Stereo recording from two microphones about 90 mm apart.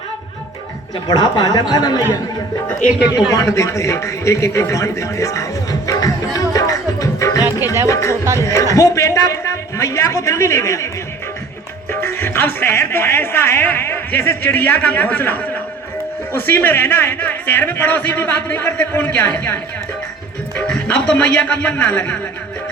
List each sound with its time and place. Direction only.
1.0 s a woman's voice: 50° left (ahead or behind)
3.3 s a man's voice: 35° left (ahead or behind)
5.9 s music: 40° left (ahead or behind)
7.9 s a man's voice: 35° left (ahead or behind)
11.9 s speech: 25° left (ahead or behind)
20.6 s speech: 15° left (ahead or behind)